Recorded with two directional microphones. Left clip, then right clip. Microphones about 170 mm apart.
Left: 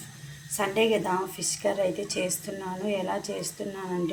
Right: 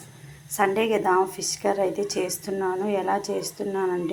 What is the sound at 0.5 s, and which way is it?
A woman's voice, 10° right (ahead or behind).